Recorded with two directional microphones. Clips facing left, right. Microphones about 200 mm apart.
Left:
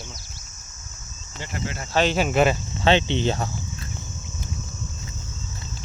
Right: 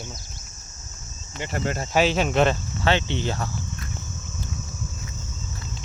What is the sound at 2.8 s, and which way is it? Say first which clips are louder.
Cricket: left 5 dB; 20° left (ahead or behind).